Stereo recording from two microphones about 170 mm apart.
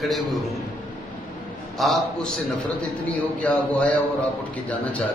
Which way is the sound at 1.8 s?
Centre (ahead or behind).